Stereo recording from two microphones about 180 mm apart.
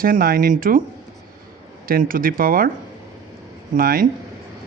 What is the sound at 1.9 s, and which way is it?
Speech, 50° right (ahead or behind).